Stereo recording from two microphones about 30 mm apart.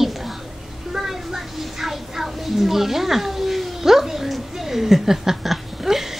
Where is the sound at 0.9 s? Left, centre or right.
Centre.